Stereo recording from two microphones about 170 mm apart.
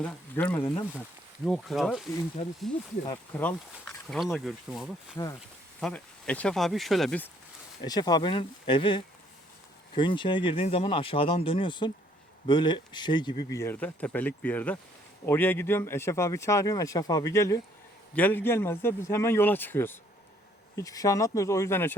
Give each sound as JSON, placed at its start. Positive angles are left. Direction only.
{"t": 0.0, "sound": "speech", "side_deg": 5}
{"t": 3.3, "sound": "speech", "side_deg": 5}
{"t": 5.1, "sound": "speech", "side_deg": 20}
{"t": 5.8, "sound": "speech", "side_deg": 10}
{"t": 7.9, "sound": "speech", "side_deg": 25}